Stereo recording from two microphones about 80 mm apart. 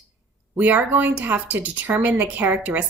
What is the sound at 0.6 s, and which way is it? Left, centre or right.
Speech, right.